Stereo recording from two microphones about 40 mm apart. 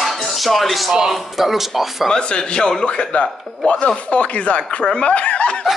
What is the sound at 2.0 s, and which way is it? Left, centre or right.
Speech, centre.